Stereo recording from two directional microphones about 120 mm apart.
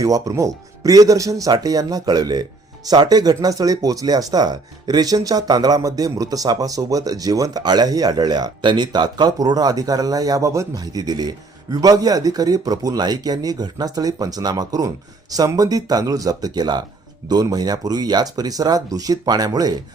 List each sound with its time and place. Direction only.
0.0 s speech: 30° right (ahead or behind)